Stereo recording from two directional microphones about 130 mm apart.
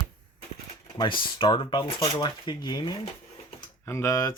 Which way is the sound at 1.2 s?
40° left (ahead or behind).